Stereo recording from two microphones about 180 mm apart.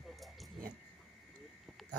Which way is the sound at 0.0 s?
Centre (ahead or behind).